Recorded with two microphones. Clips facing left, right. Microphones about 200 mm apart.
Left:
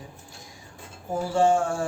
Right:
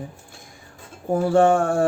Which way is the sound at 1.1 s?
60° right (ahead or behind).